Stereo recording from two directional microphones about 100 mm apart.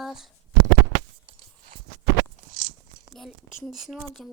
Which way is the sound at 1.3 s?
60° right (ahead or behind).